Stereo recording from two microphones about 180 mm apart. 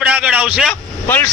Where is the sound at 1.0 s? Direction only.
10° left (ahead or behind).